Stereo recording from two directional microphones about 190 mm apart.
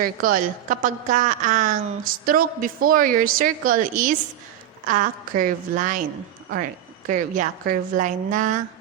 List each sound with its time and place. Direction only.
0.0 s a woman's voice: 45° right (ahead or behind)
7.1 s a woman's voice: 40° right (ahead or behind)